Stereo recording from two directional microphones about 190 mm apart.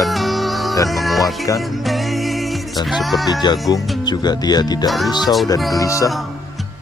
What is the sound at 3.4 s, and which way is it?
Speech, 20° left (ahead or behind).